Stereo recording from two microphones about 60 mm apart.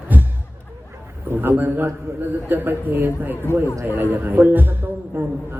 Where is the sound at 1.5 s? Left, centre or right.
Right.